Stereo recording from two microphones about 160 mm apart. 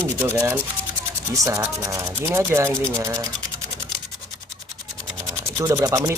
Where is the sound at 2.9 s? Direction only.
20° right (ahead or behind).